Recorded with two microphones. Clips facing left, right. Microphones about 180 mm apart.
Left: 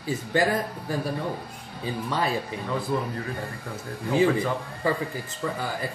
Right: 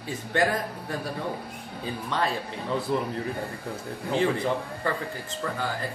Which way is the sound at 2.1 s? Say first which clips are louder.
Even; 5° left (ahead or behind).